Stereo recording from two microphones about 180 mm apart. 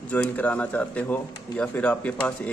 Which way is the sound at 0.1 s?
10° left (ahead or behind).